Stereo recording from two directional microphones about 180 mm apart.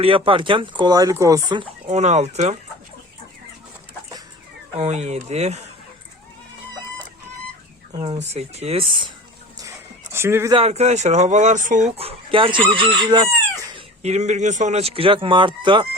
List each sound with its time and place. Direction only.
0.0 s speech: 30° right (ahead or behind)
1.9 s speech: 40° right (ahead or behind)
4.8 s speech: 40° right (ahead or behind)
7.9 s speech: 35° right (ahead or behind)
9.6 s a sound: 15° right (ahead or behind)
10.5 s speech: 35° right (ahead or behind)
13.7 s speech: 35° right (ahead or behind)